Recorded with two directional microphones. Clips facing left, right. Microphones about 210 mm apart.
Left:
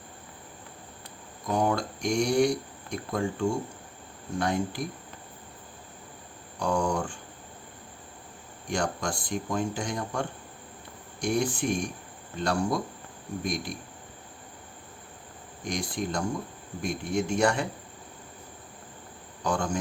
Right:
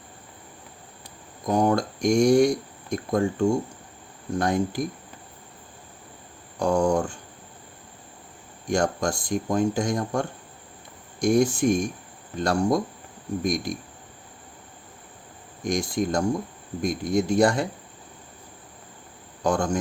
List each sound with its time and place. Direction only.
1.5 s speech: 40° right (ahead or behind)
6.6 s speech: 40° right (ahead or behind)
8.7 s speech: 45° right (ahead or behind)
15.6 s speech: 45° right (ahead or behind)
19.5 s speech: 45° right (ahead or behind)